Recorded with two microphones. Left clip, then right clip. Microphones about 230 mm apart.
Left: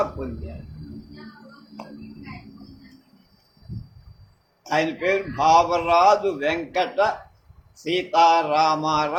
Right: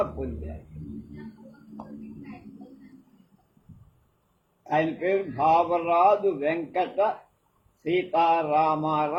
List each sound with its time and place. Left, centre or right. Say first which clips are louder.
4.6 s a man's voice: left 3 dB; left